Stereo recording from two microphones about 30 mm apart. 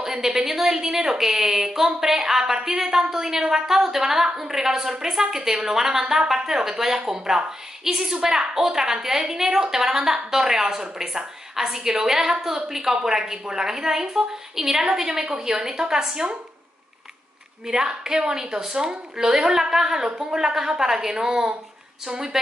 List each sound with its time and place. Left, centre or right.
0.0 s a woman's voice: centre
17.6 s a woman's voice: centre